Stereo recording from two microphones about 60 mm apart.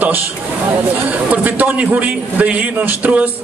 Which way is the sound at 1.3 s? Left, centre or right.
Right.